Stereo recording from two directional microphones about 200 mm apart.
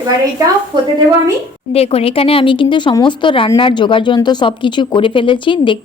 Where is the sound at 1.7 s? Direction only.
30° left (ahead or behind).